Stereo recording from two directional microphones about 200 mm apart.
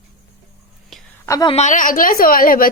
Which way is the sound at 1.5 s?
35° left (ahead or behind).